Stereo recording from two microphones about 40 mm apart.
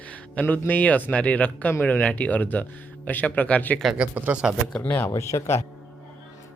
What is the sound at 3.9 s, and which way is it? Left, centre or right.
Speech, right.